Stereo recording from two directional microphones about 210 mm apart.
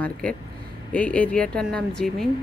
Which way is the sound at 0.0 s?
5° left (ahead or behind).